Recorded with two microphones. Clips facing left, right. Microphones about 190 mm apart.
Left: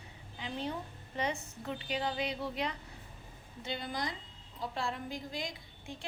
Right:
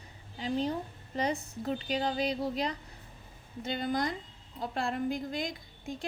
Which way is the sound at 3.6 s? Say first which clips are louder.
Right 6 dB; 50° right (ahead or behind).